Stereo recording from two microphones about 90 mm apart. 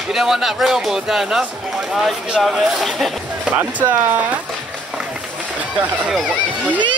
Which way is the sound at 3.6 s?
20° right (ahead or behind).